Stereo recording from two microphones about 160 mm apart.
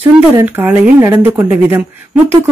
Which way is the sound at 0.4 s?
10° right (ahead or behind).